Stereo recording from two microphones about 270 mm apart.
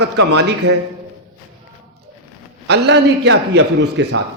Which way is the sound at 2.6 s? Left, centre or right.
Right.